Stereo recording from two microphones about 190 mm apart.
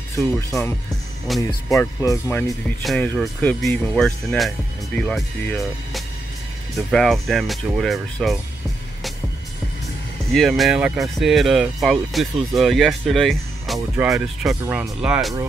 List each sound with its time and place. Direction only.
0.2 s speech: 15° left (ahead or behind)
2.8 s speech: centre (ahead or behind)
10.3 s speech: centre (ahead or behind)
13.7 s speech: 15° right (ahead or behind)
14.1 s speech: centre (ahead or behind)